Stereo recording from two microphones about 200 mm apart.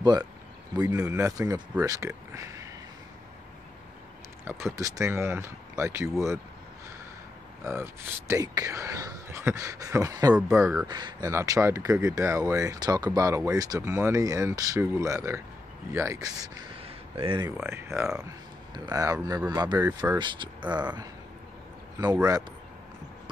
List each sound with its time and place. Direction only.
0.0 s speech: 20° right (ahead or behind)
4.5 s speech: 15° right (ahead or behind)
7.6 s speech: 10° right (ahead or behind)
10.3 s speech: 5° right (ahead or behind)
10.9 s speech: 20° right (ahead or behind)
16.8 s a sound: 25° right (ahead or behind)
17.5 s speech: 10° right (ahead or behind)
22.1 s speech: 15° right (ahead or behind)